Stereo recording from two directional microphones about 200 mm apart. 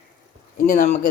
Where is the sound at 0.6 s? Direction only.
50° left (ahead or behind).